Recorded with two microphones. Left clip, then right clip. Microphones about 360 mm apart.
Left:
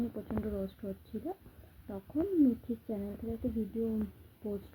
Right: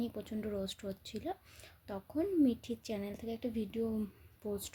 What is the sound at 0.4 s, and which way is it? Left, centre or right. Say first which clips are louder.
Speech: left 1 dB; right.